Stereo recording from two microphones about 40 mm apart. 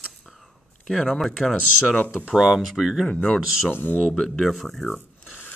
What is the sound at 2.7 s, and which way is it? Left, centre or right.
Speech, centre.